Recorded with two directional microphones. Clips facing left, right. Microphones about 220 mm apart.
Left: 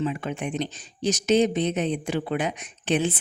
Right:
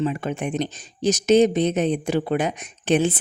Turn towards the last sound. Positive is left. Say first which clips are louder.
# right 4 dB
turn(degrees=-45)  # may be behind; listen again after turning